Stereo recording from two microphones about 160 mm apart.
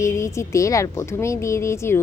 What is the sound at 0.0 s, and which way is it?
A woman's voice, 15° left (ahead or behind).